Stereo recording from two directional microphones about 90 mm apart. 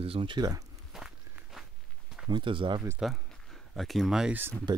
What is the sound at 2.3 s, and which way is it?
Speech, 70° right (ahead or behind).